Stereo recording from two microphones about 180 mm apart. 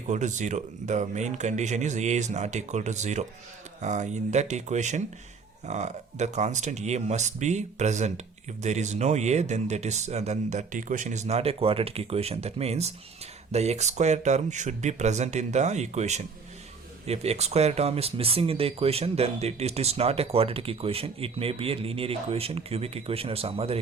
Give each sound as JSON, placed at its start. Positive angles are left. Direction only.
{"t": 0.1, "sound": "speech", "side_deg": -40}